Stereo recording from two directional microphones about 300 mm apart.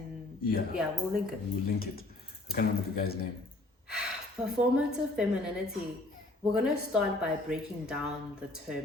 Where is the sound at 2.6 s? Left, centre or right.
Left.